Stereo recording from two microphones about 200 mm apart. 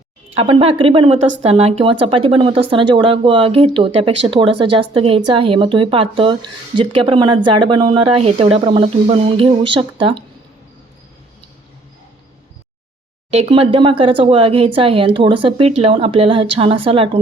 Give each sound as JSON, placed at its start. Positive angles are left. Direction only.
{"t": 0.3, "sound": "speech", "side_deg": -30}
{"t": 13.3, "sound": "speech", "side_deg": -30}